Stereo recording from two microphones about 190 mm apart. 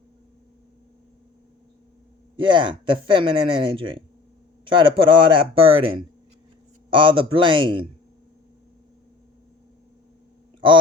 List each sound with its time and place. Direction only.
2.3 s speech: 25° right (ahead or behind)